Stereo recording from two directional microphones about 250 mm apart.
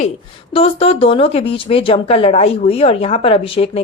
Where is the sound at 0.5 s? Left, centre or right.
Left.